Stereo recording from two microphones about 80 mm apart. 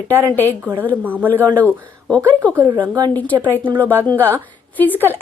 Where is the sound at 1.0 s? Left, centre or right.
Right.